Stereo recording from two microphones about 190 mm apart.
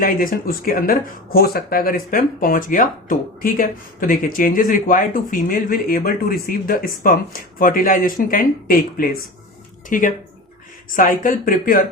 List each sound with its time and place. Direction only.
0.0 s speech: 50° left (ahead or behind)